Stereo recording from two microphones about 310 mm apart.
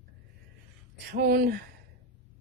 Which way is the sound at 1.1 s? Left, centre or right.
Right.